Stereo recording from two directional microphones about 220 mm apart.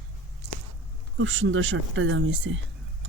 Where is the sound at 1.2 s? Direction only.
60° right (ahead or behind).